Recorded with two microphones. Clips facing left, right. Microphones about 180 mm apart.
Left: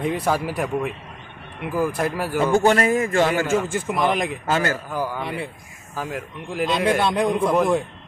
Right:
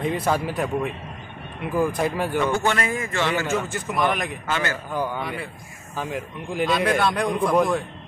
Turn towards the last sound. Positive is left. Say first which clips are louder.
# left 2 dB
turn(degrees=20)  # may be behind; listen again after turning